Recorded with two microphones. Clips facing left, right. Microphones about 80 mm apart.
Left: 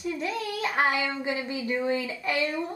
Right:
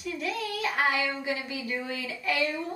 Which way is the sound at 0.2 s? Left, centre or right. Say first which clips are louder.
Left 1 dB; left.